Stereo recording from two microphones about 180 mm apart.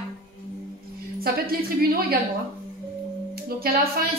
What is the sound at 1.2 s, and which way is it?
A woman's voice, 55° right (ahead or behind).